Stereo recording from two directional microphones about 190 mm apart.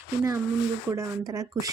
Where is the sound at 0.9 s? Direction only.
15° right (ahead or behind).